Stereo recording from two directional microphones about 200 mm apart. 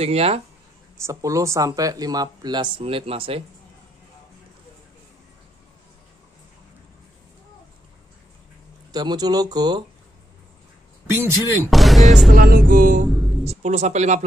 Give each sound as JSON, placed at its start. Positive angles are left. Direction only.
{"t": 0.0, "sound": "speech", "side_deg": -30}
{"t": 0.9, "sound": "speech", "side_deg": -15}
{"t": 8.9, "sound": "speech", "side_deg": -20}
{"t": 11.1, "sound": "speech", "side_deg": -15}
{"t": 11.7, "sound": "speech", "side_deg": 0}
{"t": 12.4, "sound": "music", "side_deg": -45}
{"t": 13.5, "sound": "speech", "side_deg": -35}